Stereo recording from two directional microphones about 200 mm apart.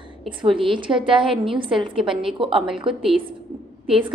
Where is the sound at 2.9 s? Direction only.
25° right (ahead or behind).